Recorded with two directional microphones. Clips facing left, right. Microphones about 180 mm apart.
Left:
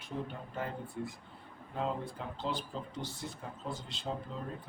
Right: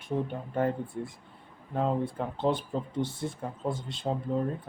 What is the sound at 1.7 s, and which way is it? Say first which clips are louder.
Speech: right 8 dB; 55° right (ahead or behind).